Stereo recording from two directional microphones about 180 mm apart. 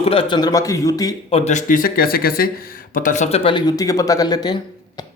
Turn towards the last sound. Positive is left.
turn(degrees=20)  # may be behind; listen again after turning